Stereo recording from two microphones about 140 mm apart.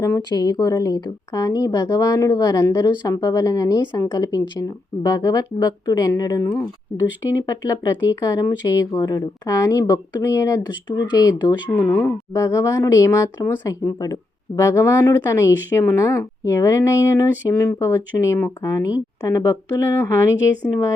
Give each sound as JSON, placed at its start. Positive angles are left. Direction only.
{"t": 0.0, "sound": "speech", "side_deg": 25}
{"t": 11.9, "sound": "speech", "side_deg": 15}